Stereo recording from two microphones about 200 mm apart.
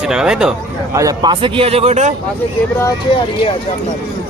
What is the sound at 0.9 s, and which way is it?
A man's voice, 20° right (ahead or behind).